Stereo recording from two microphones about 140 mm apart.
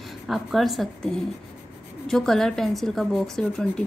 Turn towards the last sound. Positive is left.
turn(degrees=5)  # may be behind; listen again after turning